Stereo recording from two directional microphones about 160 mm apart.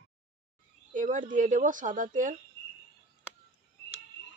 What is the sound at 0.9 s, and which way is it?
Speech, 55° right (ahead or behind).